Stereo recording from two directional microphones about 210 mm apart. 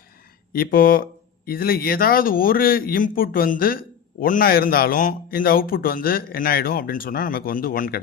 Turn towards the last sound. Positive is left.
turn(degrees=45)  # may be behind; listen again after turning